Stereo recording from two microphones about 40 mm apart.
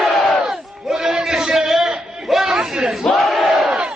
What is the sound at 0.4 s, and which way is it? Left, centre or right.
Battle cry, centre.